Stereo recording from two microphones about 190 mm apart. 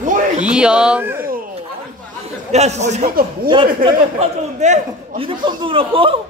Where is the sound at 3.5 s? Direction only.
25° right (ahead or behind).